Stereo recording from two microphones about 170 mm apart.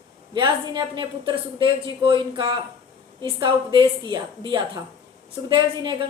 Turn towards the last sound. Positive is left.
turn(degrees=-25)  # may be behind; listen again after turning